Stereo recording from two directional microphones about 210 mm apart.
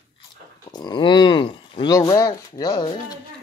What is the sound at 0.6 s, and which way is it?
Speech, 20° left (ahead or behind).